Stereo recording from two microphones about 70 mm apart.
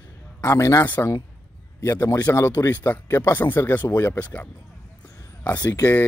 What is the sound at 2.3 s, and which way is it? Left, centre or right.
Speech, left.